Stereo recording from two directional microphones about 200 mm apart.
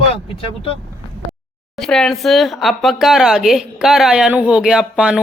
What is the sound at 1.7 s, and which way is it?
Speech, centre (ahead or behind).